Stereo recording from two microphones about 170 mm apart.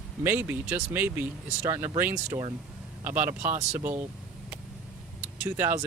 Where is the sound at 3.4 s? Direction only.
45° right (ahead or behind).